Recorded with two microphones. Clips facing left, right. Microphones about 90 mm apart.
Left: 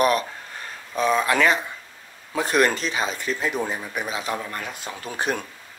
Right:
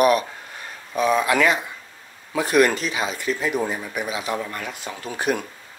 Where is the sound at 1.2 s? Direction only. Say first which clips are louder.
Right 1 dB; 40° left (ahead or behind).